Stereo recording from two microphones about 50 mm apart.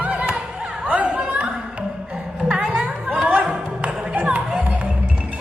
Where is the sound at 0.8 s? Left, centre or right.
Right.